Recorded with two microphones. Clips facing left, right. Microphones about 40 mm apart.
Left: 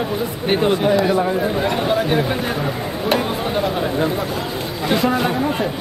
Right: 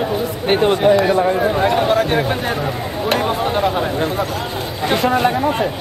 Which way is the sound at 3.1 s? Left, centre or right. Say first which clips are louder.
Right 2 dB; right.